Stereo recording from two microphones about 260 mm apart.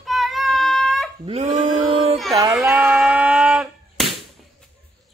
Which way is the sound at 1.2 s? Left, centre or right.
Right.